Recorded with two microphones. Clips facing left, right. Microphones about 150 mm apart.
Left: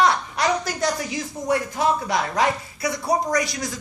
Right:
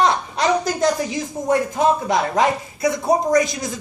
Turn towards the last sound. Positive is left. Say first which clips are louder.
# right 6 dB
turn(degrees=-20)  # may be behind; listen again after turning